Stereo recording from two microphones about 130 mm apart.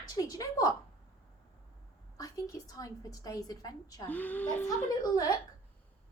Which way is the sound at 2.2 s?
30° left (ahead or behind).